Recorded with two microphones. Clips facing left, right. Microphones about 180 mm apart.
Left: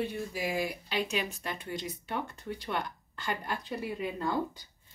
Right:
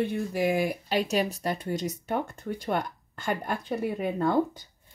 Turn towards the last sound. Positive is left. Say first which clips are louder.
# right 7 dB
turn(degrees=-55)  # may be behind; listen again after turning